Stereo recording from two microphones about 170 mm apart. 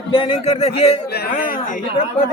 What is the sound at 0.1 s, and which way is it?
Speech, 30° left (ahead or behind).